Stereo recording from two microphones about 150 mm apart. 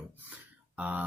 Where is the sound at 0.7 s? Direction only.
10° right (ahead or behind).